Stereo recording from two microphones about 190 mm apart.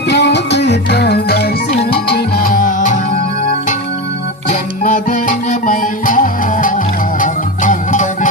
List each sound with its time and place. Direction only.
0.1 s music: 60° left (ahead or behind); by 3.0 s 40° left (ahead or behind)
4.8 s music: 40° left (ahead or behind)